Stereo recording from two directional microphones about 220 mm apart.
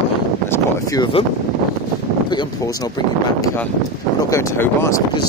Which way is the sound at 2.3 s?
20° left (ahead or behind).